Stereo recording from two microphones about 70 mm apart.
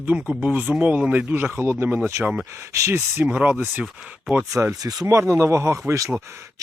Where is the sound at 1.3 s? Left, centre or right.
Right.